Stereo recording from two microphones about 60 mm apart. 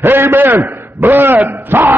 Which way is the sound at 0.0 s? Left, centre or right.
Right.